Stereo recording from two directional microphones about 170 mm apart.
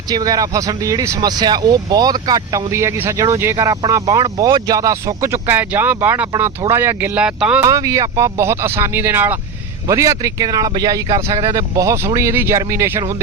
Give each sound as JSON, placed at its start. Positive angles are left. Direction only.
{"t": 0.1, "sound": "speech", "side_deg": -20}
{"t": 7.6, "sound": "speech", "side_deg": -20}